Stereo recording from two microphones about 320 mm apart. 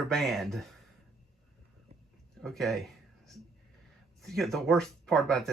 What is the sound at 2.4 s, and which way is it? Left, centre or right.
Speech, centre.